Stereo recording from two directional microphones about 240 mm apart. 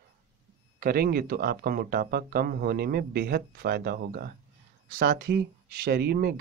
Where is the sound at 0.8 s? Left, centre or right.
Right.